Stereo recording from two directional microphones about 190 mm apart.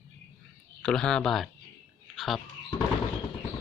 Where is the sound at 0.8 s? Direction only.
5° left (ahead or behind).